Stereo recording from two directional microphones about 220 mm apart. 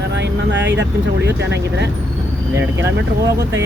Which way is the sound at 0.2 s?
55° right (ahead or behind).